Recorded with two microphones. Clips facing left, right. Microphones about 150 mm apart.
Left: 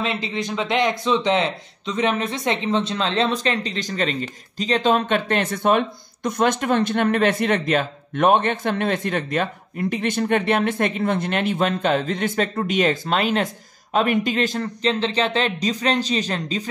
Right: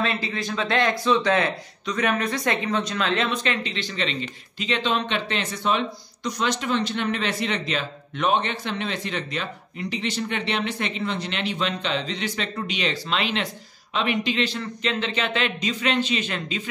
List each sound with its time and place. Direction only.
0.0 s a man's voice: 20° left (ahead or behind); by 16.6 s 40° left (ahead or behind)